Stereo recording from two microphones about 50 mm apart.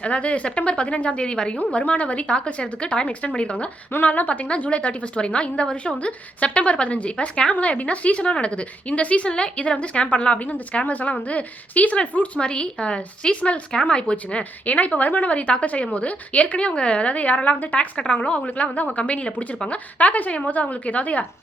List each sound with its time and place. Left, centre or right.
0.0 s a woman's voice: left